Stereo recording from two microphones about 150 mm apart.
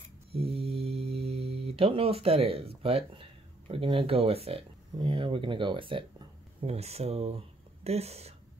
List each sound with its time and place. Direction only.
0.3 s speech: 40° right (ahead or behind)